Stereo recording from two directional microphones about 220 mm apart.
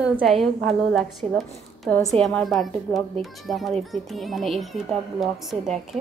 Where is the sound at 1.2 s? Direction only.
30° right (ahead or behind).